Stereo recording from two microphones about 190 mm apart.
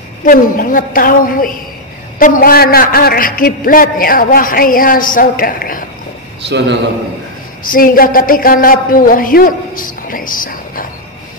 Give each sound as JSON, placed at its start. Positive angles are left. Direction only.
{"t": 0.2, "sound": "a man's voice", "side_deg": 45}
{"t": 7.7, "sound": "a man's voice", "side_deg": 50}